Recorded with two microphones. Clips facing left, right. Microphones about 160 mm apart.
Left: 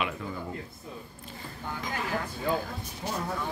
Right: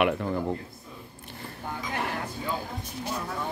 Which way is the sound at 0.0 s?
65° right (ahead or behind).